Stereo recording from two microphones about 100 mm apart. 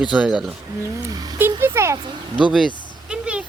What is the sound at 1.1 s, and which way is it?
Speech, 40° right (ahead or behind).